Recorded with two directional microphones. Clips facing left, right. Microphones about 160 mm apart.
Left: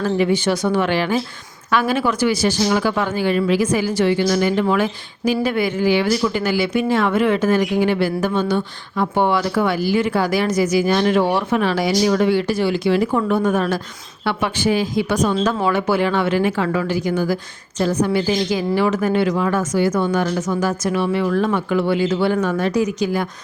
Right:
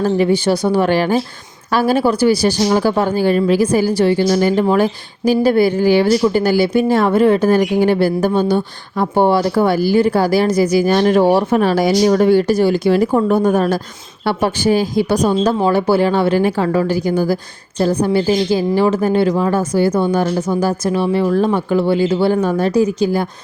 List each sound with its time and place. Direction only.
0.0 s speech: 35° right (ahead or behind)